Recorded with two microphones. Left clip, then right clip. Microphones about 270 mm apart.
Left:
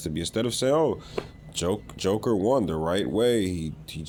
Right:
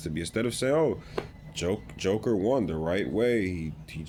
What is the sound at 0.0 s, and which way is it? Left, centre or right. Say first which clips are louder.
Speech: left 2 dB; centre.